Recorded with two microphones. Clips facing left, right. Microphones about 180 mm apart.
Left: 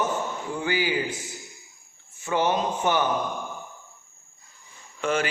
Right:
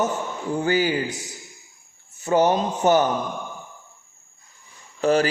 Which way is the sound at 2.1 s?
40° right (ahead or behind).